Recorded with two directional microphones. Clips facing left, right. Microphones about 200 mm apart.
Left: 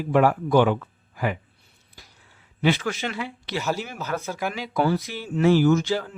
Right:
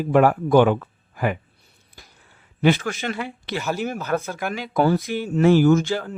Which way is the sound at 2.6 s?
50° right (ahead or behind).